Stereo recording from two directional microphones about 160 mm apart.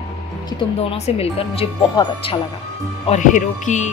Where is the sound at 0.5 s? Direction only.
40° left (ahead or behind).